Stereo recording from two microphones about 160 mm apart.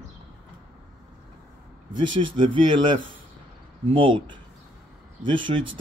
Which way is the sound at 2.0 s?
30° right (ahead or behind).